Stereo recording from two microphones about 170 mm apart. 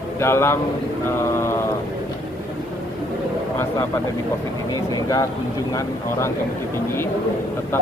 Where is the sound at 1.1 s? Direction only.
15° left (ahead or behind).